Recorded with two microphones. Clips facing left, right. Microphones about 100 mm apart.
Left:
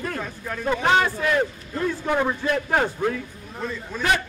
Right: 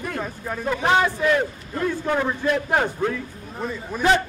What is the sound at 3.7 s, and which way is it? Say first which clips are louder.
Speech: right 6 dB; 15° right (ahead or behind).